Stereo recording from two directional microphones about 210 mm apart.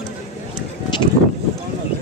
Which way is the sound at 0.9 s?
20° left (ahead or behind).